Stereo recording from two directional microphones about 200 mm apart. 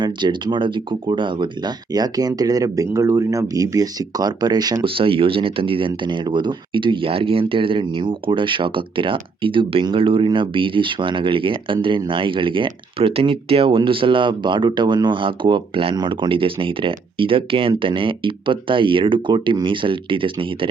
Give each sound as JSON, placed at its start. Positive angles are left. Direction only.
{"t": 0.0, "sound": "speech", "side_deg": -20}